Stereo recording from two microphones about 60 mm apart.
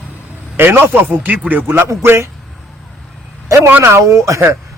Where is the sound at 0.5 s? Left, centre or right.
Right.